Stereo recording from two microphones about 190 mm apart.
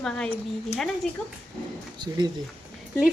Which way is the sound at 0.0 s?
5° left (ahead or behind).